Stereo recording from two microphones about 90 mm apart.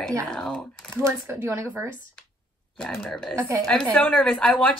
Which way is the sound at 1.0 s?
25° right (ahead or behind).